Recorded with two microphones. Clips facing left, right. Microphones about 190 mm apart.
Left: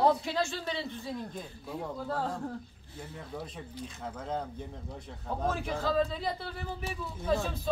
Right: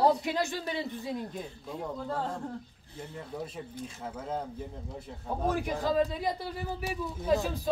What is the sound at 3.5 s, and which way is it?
Speech, 5° right (ahead or behind).